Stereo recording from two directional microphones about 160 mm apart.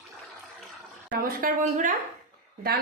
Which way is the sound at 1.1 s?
65° right (ahead or behind).